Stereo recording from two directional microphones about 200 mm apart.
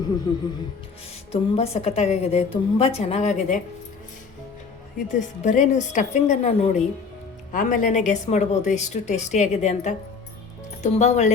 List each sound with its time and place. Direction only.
0.3 s a woman's voice: 20° left (ahead or behind)
5.4 s a woman's voice: 40° left (ahead or behind)
10.9 s a woman's voice: 35° left (ahead or behind)